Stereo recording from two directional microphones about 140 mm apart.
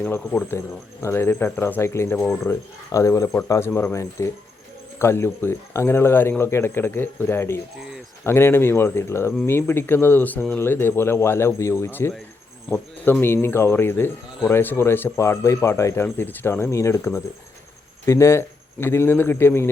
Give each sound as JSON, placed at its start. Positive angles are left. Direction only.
{"t": 0.0, "sound": "a man's voice", "side_deg": 10}